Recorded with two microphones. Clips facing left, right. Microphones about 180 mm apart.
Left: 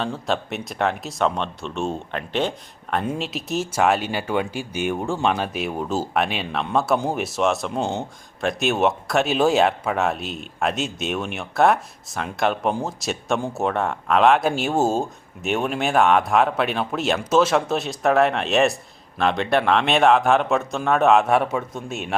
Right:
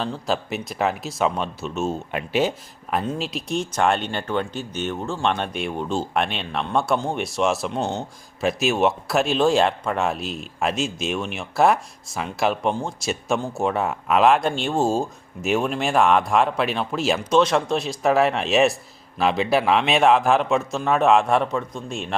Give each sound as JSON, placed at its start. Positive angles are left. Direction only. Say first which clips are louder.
{"t": 0.0, "sound": "speech", "louder": "even", "side_deg": 0}
{"t": 3.0, "sound": "speech", "louder": "even", "side_deg": 5}
{"t": 5.2, "sound": "speech", "louder": "right 2 dB", "side_deg": 5}